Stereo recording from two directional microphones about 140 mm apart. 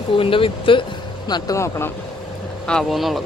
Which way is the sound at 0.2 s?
40° left (ahead or behind).